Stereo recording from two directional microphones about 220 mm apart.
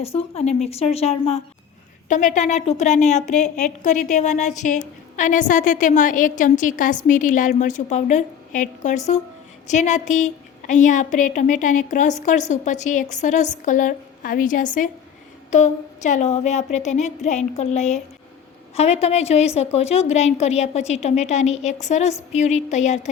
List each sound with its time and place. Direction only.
0.0 s a woman's voice: 25° left (ahead or behind)